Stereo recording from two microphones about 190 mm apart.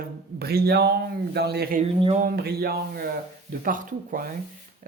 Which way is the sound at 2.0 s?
30° right (ahead or behind).